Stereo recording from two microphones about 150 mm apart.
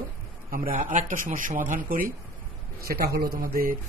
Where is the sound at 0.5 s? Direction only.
65° right (ahead or behind).